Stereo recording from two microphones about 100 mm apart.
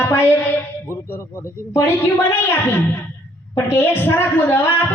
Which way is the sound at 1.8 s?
25° left (ahead or behind).